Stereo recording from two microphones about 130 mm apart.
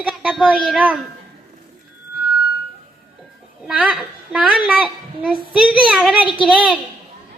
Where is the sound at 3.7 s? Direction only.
5° right (ahead or behind).